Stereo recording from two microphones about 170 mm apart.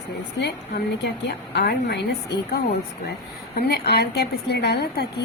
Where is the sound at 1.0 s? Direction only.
75° left (ahead or behind).